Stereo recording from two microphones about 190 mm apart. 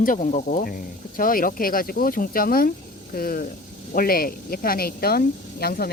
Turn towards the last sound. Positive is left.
turn(degrees=50)  # may be behind; listen again after turning